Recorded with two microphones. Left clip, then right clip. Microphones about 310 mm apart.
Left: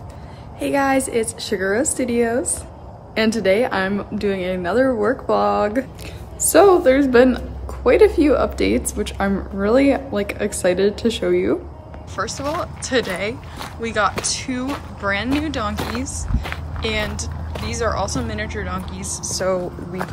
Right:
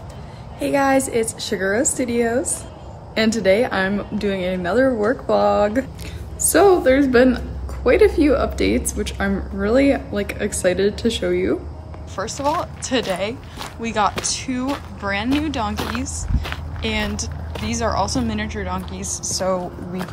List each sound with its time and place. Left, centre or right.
0.6 s a woman's voice: centre
12.2 s speech: centre